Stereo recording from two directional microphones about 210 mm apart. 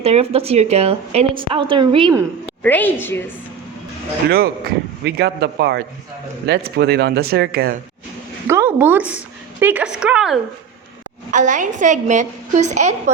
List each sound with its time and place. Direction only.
0.0 s speech: 30° right (ahead or behind)
2.6 s a woman's voice: 10° left (ahead or behind)
5.0 s speech: 50° right (ahead or behind)
8.4 s a woman's voice: 10° right (ahead or behind)
11.3 s a woman's voice: 35° right (ahead or behind)